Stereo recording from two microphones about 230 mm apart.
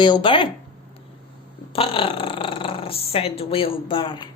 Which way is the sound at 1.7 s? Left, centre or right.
Left.